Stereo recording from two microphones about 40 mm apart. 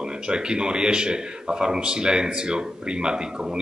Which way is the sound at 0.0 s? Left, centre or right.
Right.